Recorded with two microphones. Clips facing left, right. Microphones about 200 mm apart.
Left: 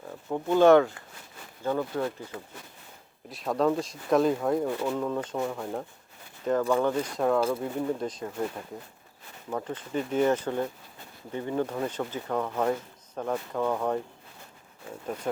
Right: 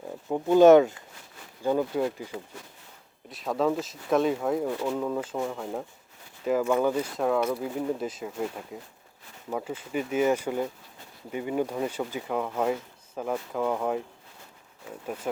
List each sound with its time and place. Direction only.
0.3 s speech: 15° right (ahead or behind)
3.2 s speech: centre (ahead or behind)